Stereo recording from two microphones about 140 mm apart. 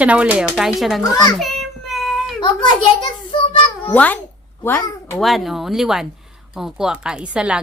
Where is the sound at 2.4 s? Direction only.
35° left (ahead or behind).